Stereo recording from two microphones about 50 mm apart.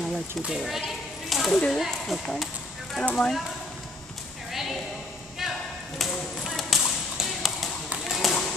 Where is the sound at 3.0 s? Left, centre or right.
Left.